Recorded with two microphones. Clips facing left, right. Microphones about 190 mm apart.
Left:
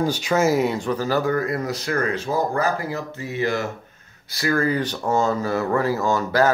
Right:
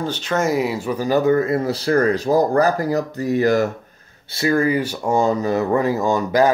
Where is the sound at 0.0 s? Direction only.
10° left (ahead or behind); by 3.7 s 40° right (ahead or behind).